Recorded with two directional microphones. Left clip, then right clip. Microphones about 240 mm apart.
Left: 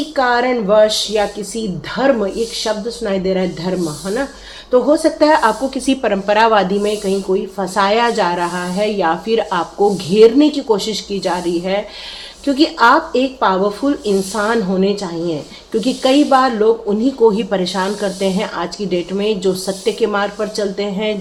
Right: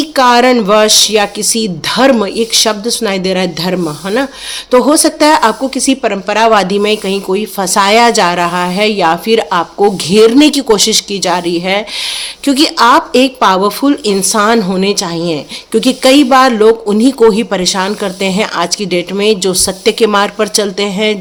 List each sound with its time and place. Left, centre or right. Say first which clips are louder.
0.2 s a woman's voice: right 8 dB; right